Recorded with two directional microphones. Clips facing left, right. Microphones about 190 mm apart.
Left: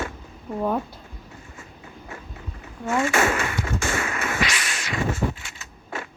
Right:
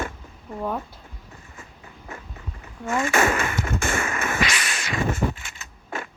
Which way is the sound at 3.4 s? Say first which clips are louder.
Right 1 dB; 50° right (ahead or behind).